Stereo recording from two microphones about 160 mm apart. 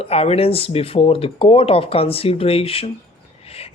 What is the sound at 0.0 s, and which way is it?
Speech, 40° left (ahead or behind).